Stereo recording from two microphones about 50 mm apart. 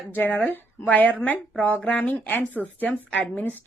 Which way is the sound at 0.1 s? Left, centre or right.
Left.